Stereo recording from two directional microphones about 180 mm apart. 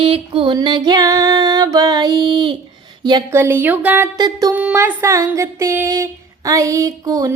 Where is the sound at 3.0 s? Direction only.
25° right (ahead or behind).